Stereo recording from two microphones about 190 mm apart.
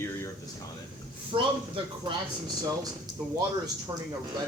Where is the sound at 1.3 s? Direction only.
25° right (ahead or behind).